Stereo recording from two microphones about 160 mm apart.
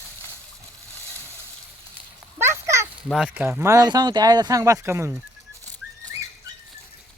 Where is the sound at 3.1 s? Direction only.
5° right (ahead or behind).